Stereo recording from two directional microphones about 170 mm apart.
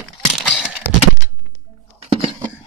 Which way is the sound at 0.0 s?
Centre (ahead or behind).